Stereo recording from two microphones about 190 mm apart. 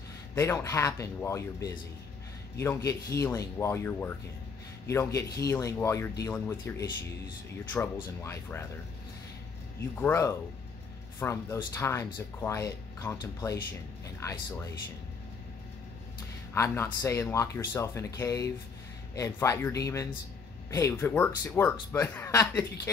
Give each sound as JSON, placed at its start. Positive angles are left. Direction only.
{"t": 0.3, "sound": "speech", "side_deg": 15}
{"t": 9.8, "sound": "speech", "side_deg": 10}
{"t": 16.5, "sound": "speech", "side_deg": 10}